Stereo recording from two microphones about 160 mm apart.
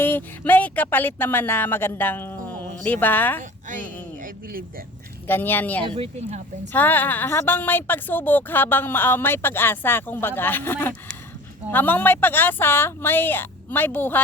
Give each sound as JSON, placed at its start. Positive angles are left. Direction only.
{"t": 0.0, "sound": "a woman's voice", "side_deg": 10}
{"t": 3.7, "sound": "speech", "side_deg": -55}
{"t": 5.3, "sound": "a woman's voice", "side_deg": 10}
{"t": 5.8, "sound": "speech", "side_deg": -35}
{"t": 6.7, "sound": "a woman's voice", "side_deg": 10}